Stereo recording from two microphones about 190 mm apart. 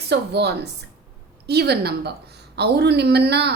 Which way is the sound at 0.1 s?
65° right (ahead or behind).